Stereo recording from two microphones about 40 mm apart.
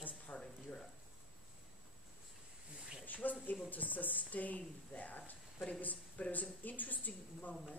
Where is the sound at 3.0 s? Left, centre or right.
Left.